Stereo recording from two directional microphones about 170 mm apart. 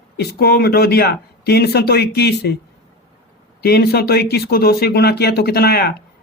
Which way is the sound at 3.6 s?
65° left (ahead or behind).